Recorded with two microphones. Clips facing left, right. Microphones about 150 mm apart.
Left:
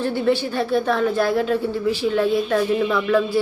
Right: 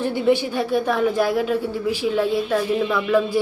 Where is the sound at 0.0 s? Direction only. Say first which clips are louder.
Right 1 dB; 15° right (ahead or behind).